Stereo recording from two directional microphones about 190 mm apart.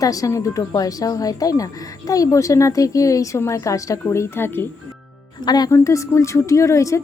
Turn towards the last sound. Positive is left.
turn(degrees=15)  # may be behind; listen again after turning